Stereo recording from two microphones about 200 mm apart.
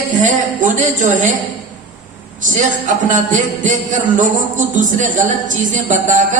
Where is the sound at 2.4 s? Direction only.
40° right (ahead or behind).